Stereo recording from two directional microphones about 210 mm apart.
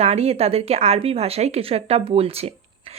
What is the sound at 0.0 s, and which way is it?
Speech, 30° right (ahead or behind).